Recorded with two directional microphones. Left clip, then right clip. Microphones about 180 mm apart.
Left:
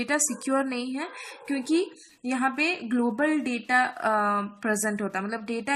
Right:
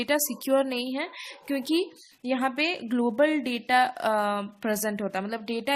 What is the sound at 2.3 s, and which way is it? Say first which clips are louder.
A woman's voice: left 1 dB; 40° right (ahead or behind).